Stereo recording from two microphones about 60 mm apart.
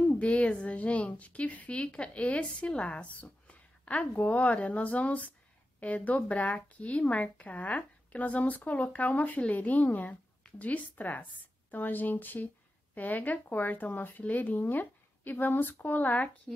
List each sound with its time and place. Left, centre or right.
0.2 s a woman's voice: left
16.5 s speech: centre